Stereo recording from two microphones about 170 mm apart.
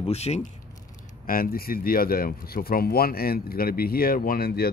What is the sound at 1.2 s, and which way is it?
Speech, 60° left (ahead or behind).